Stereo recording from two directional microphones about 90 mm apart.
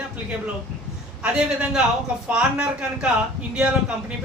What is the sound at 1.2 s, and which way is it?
Speech, 10° right (ahead or behind).